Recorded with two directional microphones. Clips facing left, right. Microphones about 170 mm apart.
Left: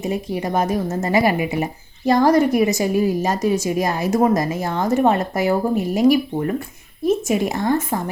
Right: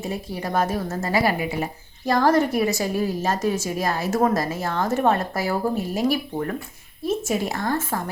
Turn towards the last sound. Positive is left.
turn(degrees=20)  # may be behind; listen again after turning